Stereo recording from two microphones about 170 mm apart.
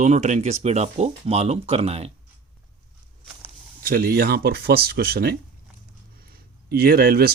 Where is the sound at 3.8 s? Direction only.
60° right (ahead or behind).